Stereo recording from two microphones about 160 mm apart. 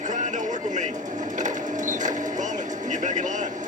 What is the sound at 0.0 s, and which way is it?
Bird, 50° right (ahead or behind).